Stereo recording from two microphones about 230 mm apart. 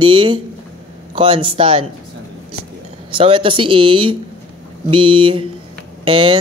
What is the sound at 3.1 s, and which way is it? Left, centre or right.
Speech, right.